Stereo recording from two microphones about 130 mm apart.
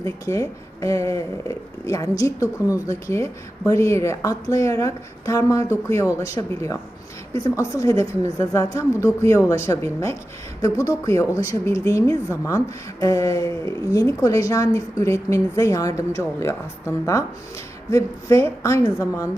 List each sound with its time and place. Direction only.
0.0 s speech: 25° left (ahead or behind)